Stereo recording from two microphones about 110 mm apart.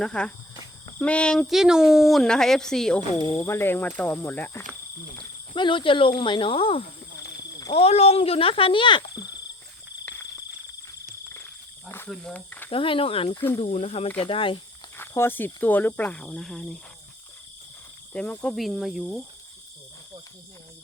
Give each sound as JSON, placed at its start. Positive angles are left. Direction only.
{"t": 0.0, "sound": "speech", "side_deg": 10}
{"t": 3.3, "sound": "speech", "side_deg": 25}
{"t": 5.5, "sound": "speech", "side_deg": 50}
{"t": 7.7, "sound": "speech", "side_deg": 65}
{"t": 12.0, "sound": "speech", "side_deg": 5}
{"t": 12.5, "sound": "speech", "side_deg": 15}
{"t": 12.7, "sound": "speech", "side_deg": 55}
{"t": 13.6, "sound": "speech", "side_deg": 70}
{"t": 14.2, "sound": "speech", "side_deg": 55}
{"t": 14.9, "sound": "speech", "side_deg": 20}
{"t": 18.1, "sound": "speech", "side_deg": 10}
{"t": 18.5, "sound": "speech", "side_deg": 0}